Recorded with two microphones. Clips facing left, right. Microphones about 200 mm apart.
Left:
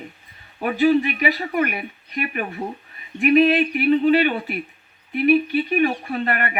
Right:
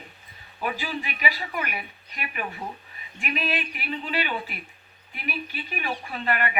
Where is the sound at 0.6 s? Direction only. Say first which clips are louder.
Left 13 dB; 50° left (ahead or behind).